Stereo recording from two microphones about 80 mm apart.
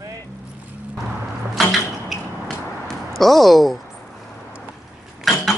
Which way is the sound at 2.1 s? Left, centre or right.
Centre.